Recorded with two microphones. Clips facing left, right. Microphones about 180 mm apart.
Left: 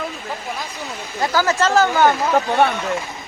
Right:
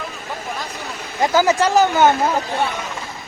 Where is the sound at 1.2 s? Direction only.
20° right (ahead or behind).